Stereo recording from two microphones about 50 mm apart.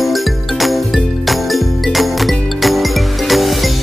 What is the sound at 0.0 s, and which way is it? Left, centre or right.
Music, centre.